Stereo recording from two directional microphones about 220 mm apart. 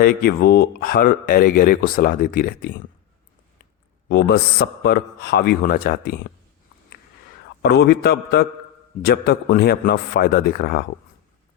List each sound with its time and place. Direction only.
0.0 s speech: 45° left (ahead or behind)
4.1 s a man's voice: 45° left (ahead or behind)
7.6 s a man's voice: 50° left (ahead or behind)